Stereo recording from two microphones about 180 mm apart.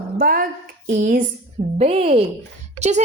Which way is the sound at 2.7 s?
40° right (ahead or behind).